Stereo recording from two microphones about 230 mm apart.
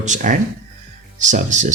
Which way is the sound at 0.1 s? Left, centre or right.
Right.